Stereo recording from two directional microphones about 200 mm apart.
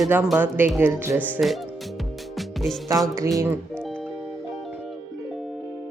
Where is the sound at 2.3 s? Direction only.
Centre (ahead or behind).